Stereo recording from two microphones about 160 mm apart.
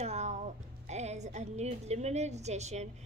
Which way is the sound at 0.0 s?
45° right (ahead or behind).